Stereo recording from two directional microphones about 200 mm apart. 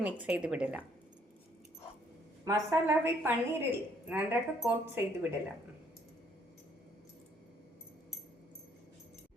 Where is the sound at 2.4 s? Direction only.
15° right (ahead or behind).